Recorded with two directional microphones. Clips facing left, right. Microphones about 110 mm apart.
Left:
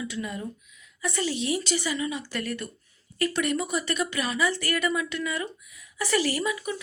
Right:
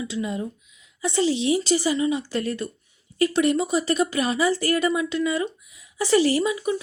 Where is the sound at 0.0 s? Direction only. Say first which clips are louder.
Right 5 dB; 25° right (ahead or behind).